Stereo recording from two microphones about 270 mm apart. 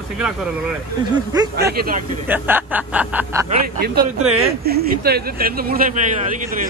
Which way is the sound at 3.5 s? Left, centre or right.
Right.